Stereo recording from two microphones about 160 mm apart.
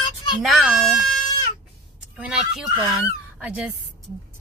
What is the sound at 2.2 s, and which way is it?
Speech, 5° right (ahead or behind).